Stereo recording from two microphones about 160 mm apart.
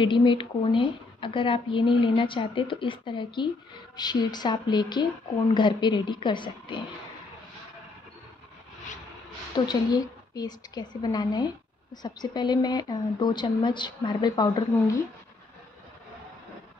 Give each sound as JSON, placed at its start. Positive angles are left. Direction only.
{"t": 0.0, "sound": "a woman's voice", "side_deg": 30}
{"t": 9.7, "sound": "a woman's voice", "side_deg": 25}